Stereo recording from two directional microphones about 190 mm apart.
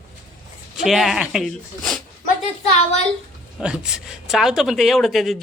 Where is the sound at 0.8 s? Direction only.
Centre (ahead or behind).